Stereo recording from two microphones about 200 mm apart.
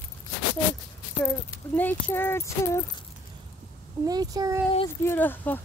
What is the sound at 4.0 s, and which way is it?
Speech, 20° right (ahead or behind).